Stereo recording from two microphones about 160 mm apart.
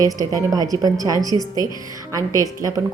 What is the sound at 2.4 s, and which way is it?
Speech, 20° right (ahead or behind).